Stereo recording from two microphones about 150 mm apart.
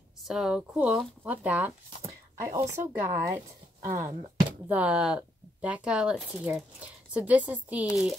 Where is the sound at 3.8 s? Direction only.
20° right (ahead or behind).